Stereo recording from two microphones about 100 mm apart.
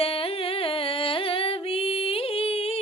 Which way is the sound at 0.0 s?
70° left (ahead or behind).